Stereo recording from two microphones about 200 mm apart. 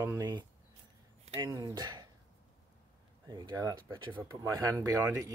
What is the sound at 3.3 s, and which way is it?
Speech, 20° right (ahead or behind).